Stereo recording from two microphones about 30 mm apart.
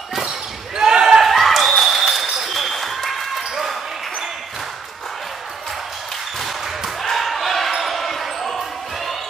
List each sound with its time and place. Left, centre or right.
0.7 s basketball bounce: right
1.2 s a sound: centre
7.0 s slam: centre
7.8 s basketball bounce: centre